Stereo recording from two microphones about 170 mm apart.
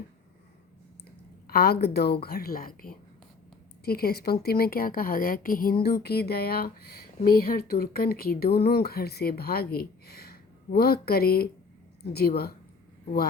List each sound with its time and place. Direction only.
1.5 s speech: 65° left (ahead or behind)
5.8 s speech: 70° left (ahead or behind)